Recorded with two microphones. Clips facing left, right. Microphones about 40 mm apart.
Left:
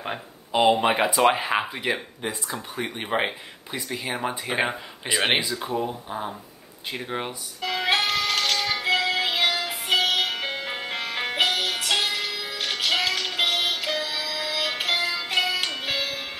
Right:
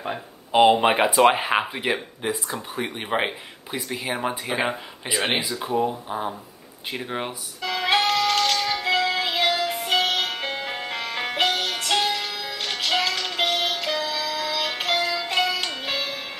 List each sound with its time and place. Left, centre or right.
0.5 s speech: centre
6.9 s music: centre